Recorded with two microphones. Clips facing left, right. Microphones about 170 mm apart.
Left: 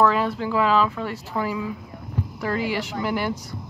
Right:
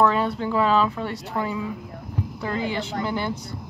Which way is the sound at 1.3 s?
10° left (ahead or behind).